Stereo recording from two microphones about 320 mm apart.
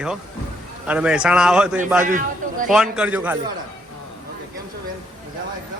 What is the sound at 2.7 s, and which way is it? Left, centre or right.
Speech, centre.